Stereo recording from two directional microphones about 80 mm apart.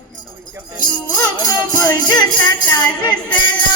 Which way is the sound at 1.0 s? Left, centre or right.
Left.